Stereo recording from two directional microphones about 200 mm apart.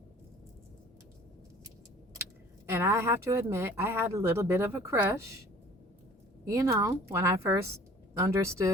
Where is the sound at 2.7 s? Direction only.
15° right (ahead or behind).